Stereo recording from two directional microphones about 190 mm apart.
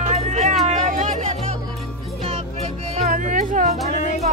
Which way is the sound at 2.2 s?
35° right (ahead or behind).